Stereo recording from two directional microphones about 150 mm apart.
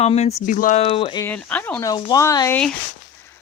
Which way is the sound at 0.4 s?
60° left (ahead or behind).